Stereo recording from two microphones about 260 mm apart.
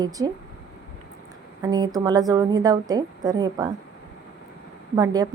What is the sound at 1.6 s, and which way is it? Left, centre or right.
Speech, centre.